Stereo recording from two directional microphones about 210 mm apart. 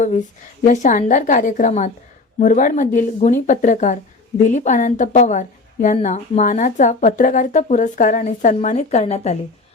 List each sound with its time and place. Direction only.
0.6 s a woman's voice: 35° left (ahead or behind)